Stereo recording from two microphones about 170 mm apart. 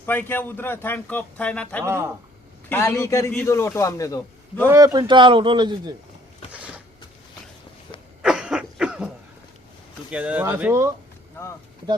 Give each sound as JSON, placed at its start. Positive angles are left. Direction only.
{"t": 0.0, "sound": "a man's voice", "side_deg": 10}
{"t": 1.8, "sound": "speech", "side_deg": -15}
{"t": 2.6, "sound": "a man's voice", "side_deg": 15}
{"t": 4.6, "sound": "a man's voice", "side_deg": -15}
{"t": 8.2, "sound": "a sound", "side_deg": -5}
{"t": 10.1, "sound": "speech", "side_deg": -5}